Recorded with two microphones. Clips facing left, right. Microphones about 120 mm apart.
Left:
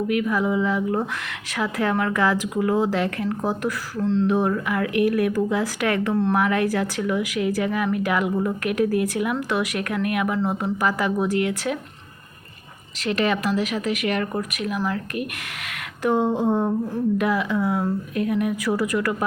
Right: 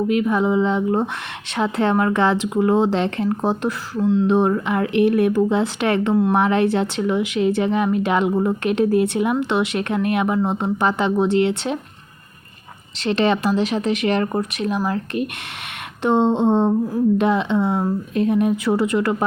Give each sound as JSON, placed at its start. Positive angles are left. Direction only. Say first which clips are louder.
{"t": 0.1, "sound": "a woman's voice", "louder": "right 3 dB", "side_deg": -25}
{"t": 4.0, "sound": "speech", "louder": "right 3 dB", "side_deg": -5}
{"t": 4.3, "sound": "a woman's voice", "louder": "right 4 dB", "side_deg": -25}
{"t": 13.0, "sound": "a woman's voice", "louder": "right 4 dB", "side_deg": -30}